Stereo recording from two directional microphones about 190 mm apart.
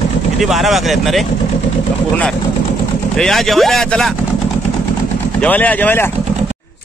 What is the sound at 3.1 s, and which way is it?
A man's voice, centre (ahead or behind).